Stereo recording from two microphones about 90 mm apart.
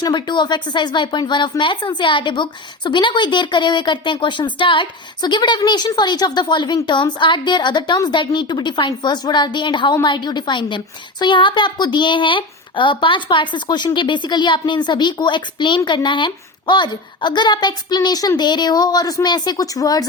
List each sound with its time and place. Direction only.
0.0 s a woman's voice: 55° left (ahead or behind)